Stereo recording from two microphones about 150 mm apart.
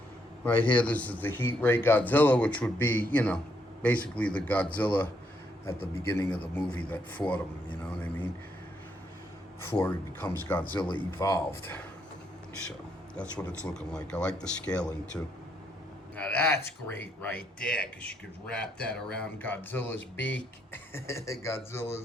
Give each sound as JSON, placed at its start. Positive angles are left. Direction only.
{"t": 0.4, "sound": "a man's voice", "side_deg": 10}
{"t": 6.1, "sound": "a man's voice", "side_deg": 10}
{"t": 9.7, "sound": "a man's voice", "side_deg": 10}
{"t": 10.6, "sound": "speech", "side_deg": 35}
{"t": 13.4, "sound": "a man's voice", "side_deg": 5}